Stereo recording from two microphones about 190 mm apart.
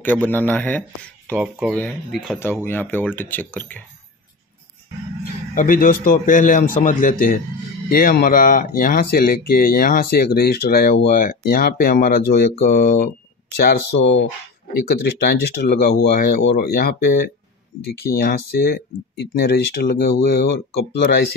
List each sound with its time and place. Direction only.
0.0 s a man's voice: 10° left (ahead or behind)
1.3 s speech: 10° right (ahead or behind)
1.8 s a man's voice: 5° left (ahead or behind)
5.5 s speech: 45° left (ahead or behind)